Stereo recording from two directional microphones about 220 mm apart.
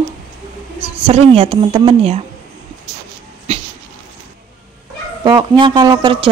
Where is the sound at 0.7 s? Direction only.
25° right (ahead or behind).